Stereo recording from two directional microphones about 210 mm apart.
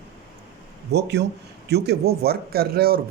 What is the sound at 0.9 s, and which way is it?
Speech, 55° right (ahead or behind).